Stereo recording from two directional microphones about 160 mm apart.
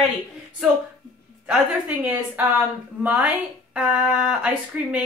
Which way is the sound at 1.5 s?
10° right (ahead or behind).